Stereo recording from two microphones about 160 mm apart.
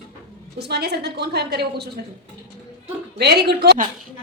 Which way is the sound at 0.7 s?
90° right.